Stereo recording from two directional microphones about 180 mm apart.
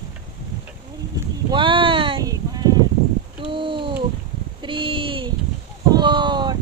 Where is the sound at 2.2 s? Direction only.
20° right (ahead or behind).